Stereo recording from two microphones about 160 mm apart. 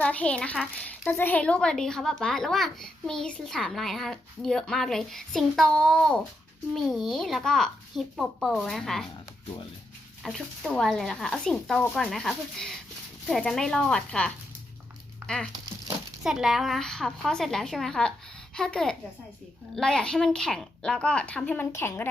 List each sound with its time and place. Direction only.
0.0 s a child's voice: 10° left (ahead or behind)
10.2 s a child's voice: centre (ahead or behind)
16.2 s a child's voice: 5° right (ahead or behind); by 22.1 s 15° left (ahead or behind)